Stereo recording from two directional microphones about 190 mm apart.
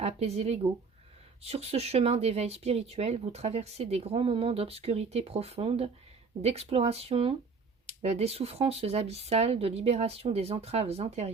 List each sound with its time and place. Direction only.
0.0 s speech: 35° right (ahead or behind)